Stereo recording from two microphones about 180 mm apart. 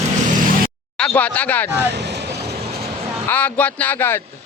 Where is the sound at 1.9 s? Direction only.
70° right (ahead or behind).